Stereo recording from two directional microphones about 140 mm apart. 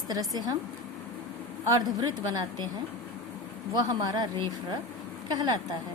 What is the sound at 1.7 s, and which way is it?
Speech, 30° right (ahead or behind).